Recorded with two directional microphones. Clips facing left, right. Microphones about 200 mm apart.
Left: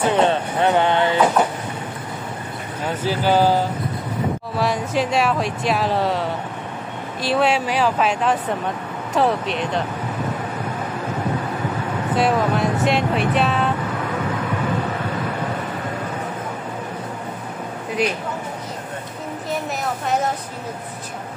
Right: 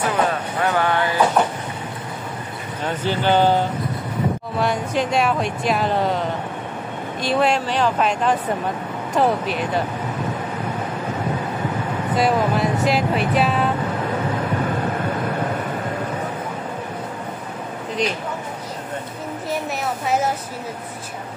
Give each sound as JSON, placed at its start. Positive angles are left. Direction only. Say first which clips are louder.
{"t": 0.0, "sound": "a sound", "louder": "left 3 dB", "side_deg": 30}
{"t": 3.0, "sound": "speech", "louder": "even", "side_deg": 5}
{"t": 12.2, "sound": "speech", "louder": "even", "side_deg": 0}